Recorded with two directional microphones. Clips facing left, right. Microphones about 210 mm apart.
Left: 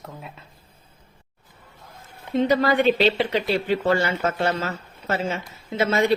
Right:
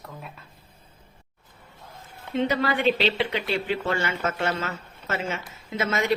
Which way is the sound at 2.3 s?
40° left (ahead or behind).